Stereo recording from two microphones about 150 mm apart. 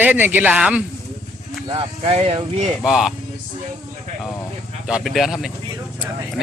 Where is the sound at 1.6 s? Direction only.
35° right (ahead or behind).